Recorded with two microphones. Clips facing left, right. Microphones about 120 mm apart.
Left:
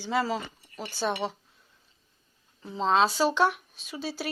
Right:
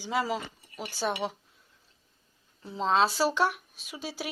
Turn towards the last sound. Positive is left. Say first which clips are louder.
# left 3 dB
turn(degrees=-10)  # may be behind; listen again after turning